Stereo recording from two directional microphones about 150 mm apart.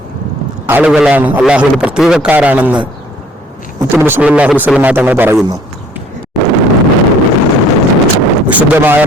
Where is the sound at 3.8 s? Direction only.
15° right (ahead or behind).